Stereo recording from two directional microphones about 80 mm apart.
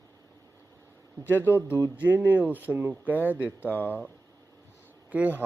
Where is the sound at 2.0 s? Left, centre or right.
Right.